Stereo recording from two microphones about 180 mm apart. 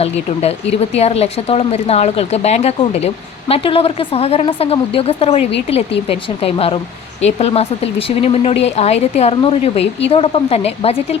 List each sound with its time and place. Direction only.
0.0 s speech: 35° left (ahead or behind)